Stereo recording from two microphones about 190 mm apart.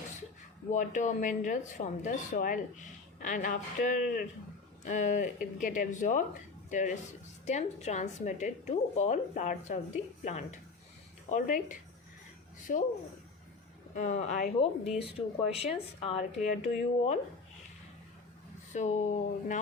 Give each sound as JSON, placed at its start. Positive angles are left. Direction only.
{"t": 0.7, "sound": "a woman's voice", "side_deg": 40}
{"t": 13.9, "sound": "speech", "side_deg": 40}
{"t": 15.2, "sound": "a woman's voice", "side_deg": 20}
{"t": 18.7, "sound": "a woman's voice", "side_deg": 40}